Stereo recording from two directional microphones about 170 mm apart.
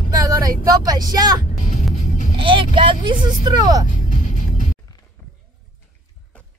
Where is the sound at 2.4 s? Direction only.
30° right (ahead or behind).